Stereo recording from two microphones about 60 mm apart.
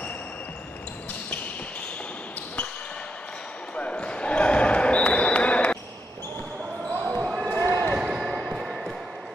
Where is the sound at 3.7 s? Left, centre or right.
Left.